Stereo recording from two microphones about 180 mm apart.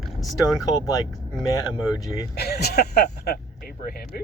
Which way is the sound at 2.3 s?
60° left (ahead or behind).